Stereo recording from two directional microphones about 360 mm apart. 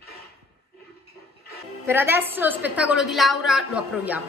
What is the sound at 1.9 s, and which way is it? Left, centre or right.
A woman's voice, centre.